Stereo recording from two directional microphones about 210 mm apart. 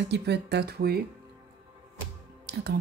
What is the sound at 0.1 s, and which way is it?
Speech, 50° right (ahead or behind).